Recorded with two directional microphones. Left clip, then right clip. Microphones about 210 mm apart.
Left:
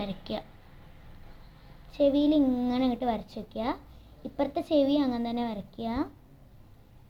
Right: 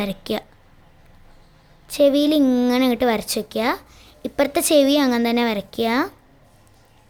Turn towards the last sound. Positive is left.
turn(degrees=-60)  # may be behind; listen again after turning